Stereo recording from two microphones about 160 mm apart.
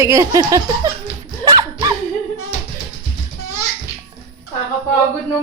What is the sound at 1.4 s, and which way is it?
Dog, 25° right (ahead or behind).